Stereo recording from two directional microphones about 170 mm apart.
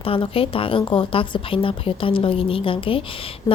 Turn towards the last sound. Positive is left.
turn(degrees=30)  # may be behind; listen again after turning